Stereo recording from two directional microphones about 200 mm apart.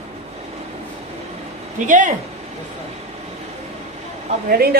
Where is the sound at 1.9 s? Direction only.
40° right (ahead or behind).